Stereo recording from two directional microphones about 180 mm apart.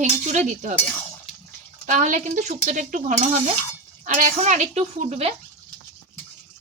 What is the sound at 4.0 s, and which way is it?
Speech, 45° right (ahead or behind).